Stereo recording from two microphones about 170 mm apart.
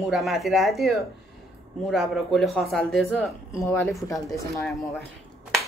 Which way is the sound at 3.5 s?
15° left (ahead or behind).